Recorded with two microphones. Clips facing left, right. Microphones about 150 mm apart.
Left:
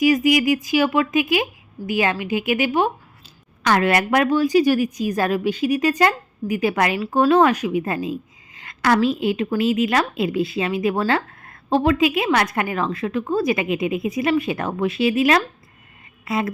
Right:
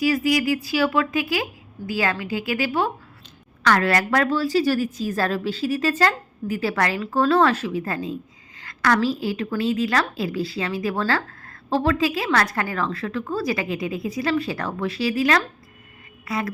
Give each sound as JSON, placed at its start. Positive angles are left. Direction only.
{"t": 0.0, "sound": "a woman's voice", "side_deg": 20}